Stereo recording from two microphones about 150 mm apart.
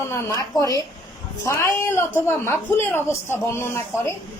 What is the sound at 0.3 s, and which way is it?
A woman's voice, 20° left (ahead or behind).